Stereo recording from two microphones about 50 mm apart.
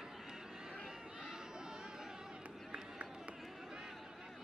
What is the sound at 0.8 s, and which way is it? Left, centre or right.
Chatter, centre.